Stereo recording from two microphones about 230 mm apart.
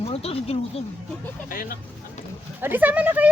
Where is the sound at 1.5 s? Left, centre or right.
Left.